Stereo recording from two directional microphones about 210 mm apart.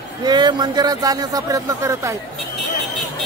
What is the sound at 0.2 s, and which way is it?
Speech, 20° right (ahead or behind).